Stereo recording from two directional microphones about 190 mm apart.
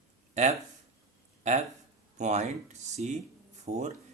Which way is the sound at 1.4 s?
40° right (ahead or behind).